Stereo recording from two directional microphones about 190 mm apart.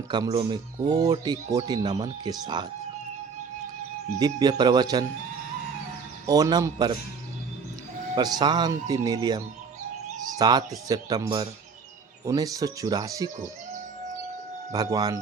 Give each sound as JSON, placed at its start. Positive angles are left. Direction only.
{"t": 0.1, "sound": "speech", "side_deg": -25}
{"t": 4.2, "sound": "speech", "side_deg": -20}
{"t": 6.2, "sound": "speech", "side_deg": -20}
{"t": 8.1, "sound": "speech", "side_deg": -20}
{"t": 14.7, "sound": "speech", "side_deg": -20}